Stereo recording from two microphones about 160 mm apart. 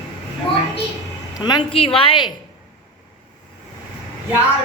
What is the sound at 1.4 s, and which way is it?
Speech, 25° left (ahead or behind).